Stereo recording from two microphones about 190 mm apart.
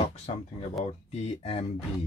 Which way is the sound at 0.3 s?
35° left (ahead or behind).